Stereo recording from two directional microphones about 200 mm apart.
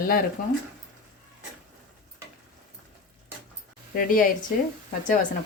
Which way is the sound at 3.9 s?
45° left (ahead or behind).